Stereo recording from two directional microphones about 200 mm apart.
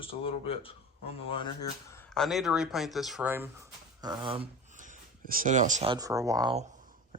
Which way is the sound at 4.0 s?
20° right (ahead or behind).